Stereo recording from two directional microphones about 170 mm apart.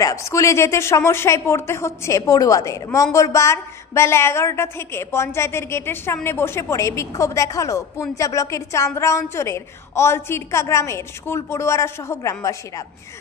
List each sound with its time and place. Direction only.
0.0 s speech: 20° left (ahead or behind)